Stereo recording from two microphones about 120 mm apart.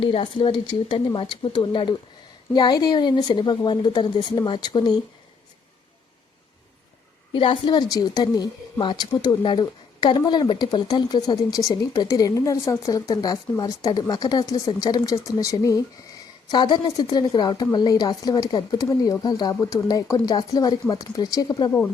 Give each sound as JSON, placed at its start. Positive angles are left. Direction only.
{"t": 0.0, "sound": "a woman's voice", "side_deg": 45}
{"t": 7.3, "sound": "a woman's voice", "side_deg": 45}